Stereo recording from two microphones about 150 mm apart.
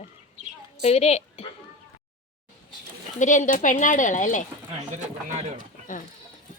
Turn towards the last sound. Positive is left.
turn(degrees=-50)  # may be behind; listen again after turning